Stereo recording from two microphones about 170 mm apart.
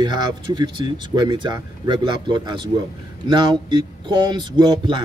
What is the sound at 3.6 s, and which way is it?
A man's voice, 30° right (ahead or behind).